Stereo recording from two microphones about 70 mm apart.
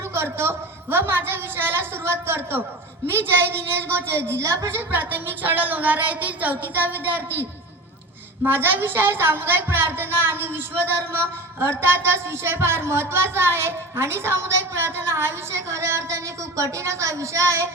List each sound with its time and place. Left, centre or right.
0.1 s a woman's voice: right
8.4 s a woman's voice: right